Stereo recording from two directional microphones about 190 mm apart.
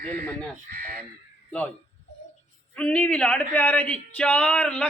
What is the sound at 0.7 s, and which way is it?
Speech, 50° right (ahead or behind).